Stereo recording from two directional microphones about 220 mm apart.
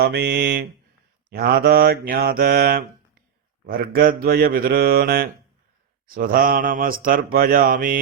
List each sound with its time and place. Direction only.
0.0 s mantra: 45° right (ahead or behind)